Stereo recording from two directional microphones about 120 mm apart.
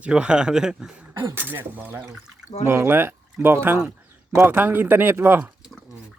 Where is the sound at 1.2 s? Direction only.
15° right (ahead or behind).